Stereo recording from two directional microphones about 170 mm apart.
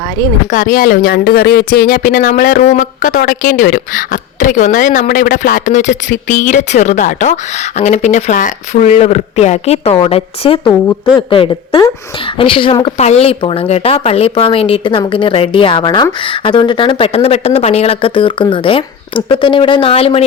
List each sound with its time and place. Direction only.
0.5 s a woman's voice: 50° left (ahead or behind); by 20.2 s 35° left (ahead or behind)